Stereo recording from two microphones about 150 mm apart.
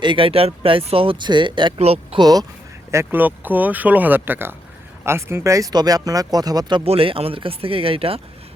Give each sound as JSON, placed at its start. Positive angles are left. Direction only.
{"t": 0.0, "sound": "speech", "side_deg": -35}
{"t": 2.2, "sound": "speech", "side_deg": -25}
{"t": 2.9, "sound": "speech", "side_deg": -15}
{"t": 6.8, "sound": "speech", "side_deg": -40}